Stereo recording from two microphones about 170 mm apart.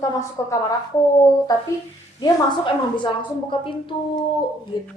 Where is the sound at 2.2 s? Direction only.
30° left (ahead or behind).